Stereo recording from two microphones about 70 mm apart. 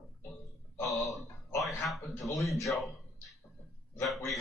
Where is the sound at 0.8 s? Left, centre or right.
Centre.